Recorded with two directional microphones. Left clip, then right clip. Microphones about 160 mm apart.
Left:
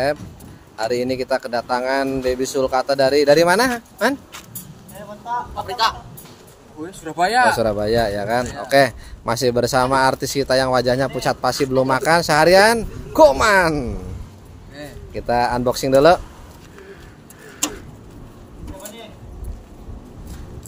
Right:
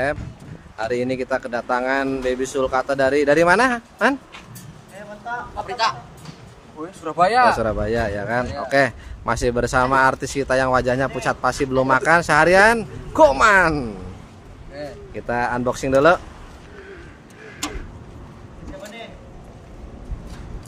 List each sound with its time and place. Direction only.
0.7 s speech: 20° left (ahead or behind)
5.3 s speech: 25° left (ahead or behind)
7.1 s speech: 15° left (ahead or behind)
15.1 s speech: 20° left (ahead or behind)